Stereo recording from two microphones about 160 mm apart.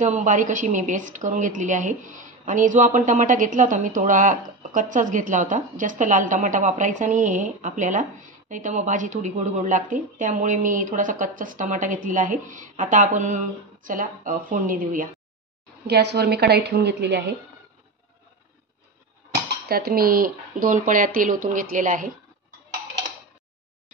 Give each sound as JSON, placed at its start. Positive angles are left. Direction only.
{"t": 0.0, "sound": "a woman's voice", "side_deg": -50}
{"t": 15.9, "sound": "a woman's voice", "side_deg": -90}
{"t": 19.7, "sound": "speech", "side_deg": -70}